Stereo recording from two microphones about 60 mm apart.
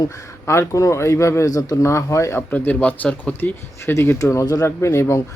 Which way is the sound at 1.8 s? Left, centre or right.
Left.